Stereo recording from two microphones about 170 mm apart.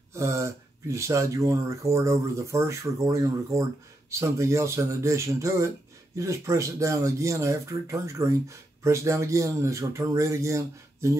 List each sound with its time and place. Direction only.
0.1 s speech: 15° right (ahead or behind)